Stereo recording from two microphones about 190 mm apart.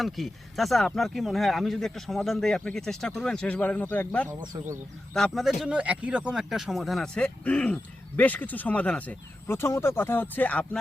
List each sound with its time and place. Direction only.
0.0 s speech: centre (ahead or behind)
4.5 s speech: 15° right (ahead or behind)
5.1 s speech: centre (ahead or behind)